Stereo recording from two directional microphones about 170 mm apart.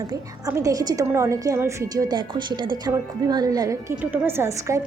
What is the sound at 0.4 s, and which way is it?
A woman's voice, 20° right (ahead or behind).